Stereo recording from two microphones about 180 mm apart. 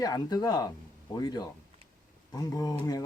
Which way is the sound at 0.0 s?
20° left (ahead or behind).